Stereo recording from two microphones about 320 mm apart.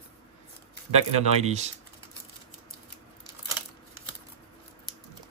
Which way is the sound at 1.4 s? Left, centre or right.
Right.